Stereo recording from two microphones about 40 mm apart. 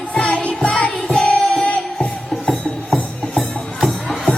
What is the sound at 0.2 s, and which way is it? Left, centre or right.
Music, left.